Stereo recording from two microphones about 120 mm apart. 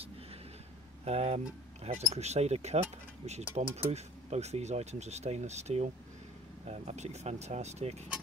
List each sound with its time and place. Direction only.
1.0 s speech: 55° right (ahead or behind)